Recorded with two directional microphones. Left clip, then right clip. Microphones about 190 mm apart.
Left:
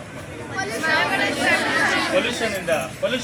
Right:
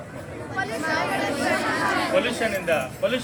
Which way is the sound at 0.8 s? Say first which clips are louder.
Left 6 dB; 60° right (ahead or behind).